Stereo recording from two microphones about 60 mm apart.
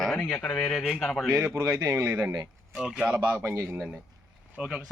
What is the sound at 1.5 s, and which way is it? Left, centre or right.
Speech, right.